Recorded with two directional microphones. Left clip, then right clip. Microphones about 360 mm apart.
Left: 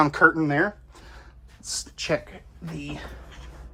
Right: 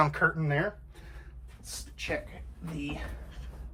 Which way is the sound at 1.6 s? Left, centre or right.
Centre.